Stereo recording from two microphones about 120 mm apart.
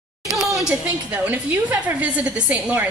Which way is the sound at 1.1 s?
10° right (ahead or behind).